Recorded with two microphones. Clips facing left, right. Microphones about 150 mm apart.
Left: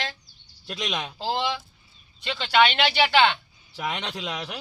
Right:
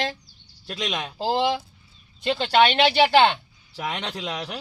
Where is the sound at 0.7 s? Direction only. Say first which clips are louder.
Right 1 dB; 5° right (ahead or behind).